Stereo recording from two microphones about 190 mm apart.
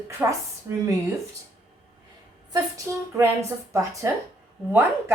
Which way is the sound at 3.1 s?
15° right (ahead or behind).